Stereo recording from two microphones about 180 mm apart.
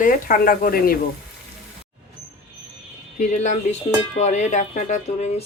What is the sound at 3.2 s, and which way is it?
Speech, 40° left (ahead or behind).